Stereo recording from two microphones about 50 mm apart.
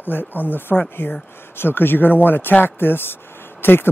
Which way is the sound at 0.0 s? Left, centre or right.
Left.